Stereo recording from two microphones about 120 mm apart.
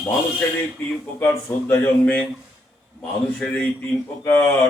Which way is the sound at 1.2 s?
20° left (ahead or behind).